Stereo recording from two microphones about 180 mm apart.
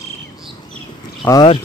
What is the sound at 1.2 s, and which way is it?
Speech, 20° left (ahead or behind).